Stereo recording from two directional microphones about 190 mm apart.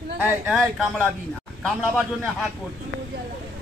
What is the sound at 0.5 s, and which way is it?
Speech, centre (ahead or behind).